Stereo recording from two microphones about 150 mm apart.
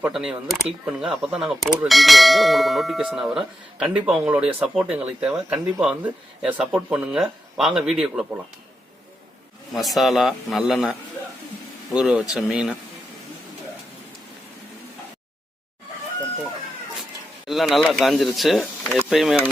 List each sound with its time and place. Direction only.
0.0 s bell: 5° right (ahead or behind)
5.3 s speech: 20° right (ahead or behind)
5.8 s bell: 10° right (ahead or behind)
9.7 s bell: centre (ahead or behind)
17.5 s bell: centre (ahead or behind)